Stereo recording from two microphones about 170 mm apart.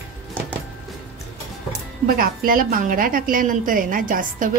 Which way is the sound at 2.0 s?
55° right (ahead or behind).